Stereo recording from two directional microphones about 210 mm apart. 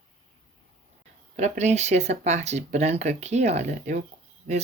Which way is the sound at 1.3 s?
35° right (ahead or behind).